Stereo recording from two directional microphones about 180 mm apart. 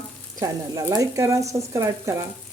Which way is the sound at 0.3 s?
20° right (ahead or behind).